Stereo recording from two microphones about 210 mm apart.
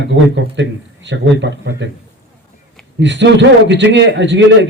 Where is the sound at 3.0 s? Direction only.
60° right (ahead or behind).